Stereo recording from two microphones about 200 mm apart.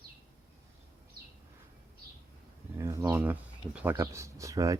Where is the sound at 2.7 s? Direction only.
15° right (ahead or behind).